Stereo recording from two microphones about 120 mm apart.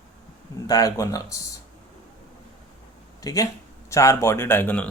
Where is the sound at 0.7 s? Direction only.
25° left (ahead or behind).